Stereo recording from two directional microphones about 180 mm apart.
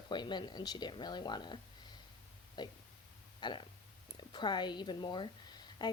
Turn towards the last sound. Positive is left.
turn(degrees=25)  # may be behind; listen again after turning